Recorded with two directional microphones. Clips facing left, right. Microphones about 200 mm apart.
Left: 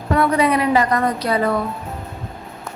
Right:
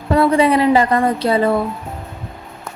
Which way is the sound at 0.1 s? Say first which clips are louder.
Right 3 dB; 30° right (ahead or behind).